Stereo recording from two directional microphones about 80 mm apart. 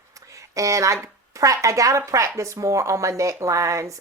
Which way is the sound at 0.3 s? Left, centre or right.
Right.